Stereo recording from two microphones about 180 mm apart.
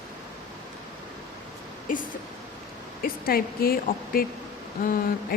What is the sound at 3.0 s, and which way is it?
Speech, 55° left (ahead or behind).